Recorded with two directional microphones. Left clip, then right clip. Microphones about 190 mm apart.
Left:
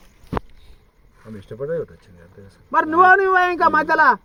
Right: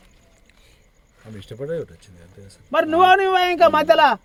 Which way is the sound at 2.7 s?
45° right (ahead or behind).